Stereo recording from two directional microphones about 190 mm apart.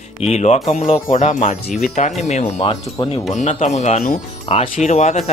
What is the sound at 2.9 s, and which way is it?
Speech, 20° left (ahead or behind).